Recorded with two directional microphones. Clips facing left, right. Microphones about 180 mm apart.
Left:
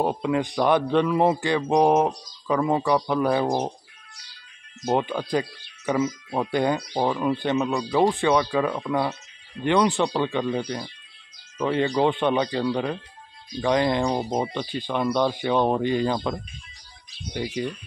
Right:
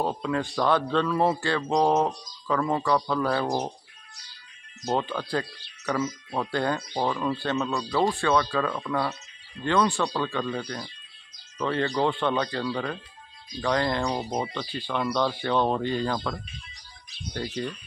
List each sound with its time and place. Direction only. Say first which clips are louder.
0.0 s a man's voice: left 4 dB; 15° left (ahead or behind)
4.8 s a man's voice: left 4 dB; 15° left (ahead or behind)